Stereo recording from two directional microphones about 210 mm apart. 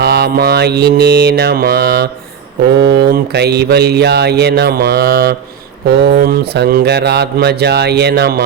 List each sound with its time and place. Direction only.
0.0 s speech: 50° right (ahead or behind)